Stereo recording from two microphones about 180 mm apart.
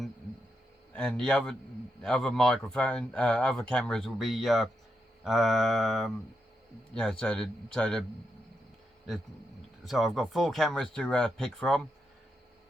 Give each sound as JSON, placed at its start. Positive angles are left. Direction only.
{"t": 0.9, "sound": "speech", "side_deg": 5}
{"t": 9.8, "sound": "speech", "side_deg": 0}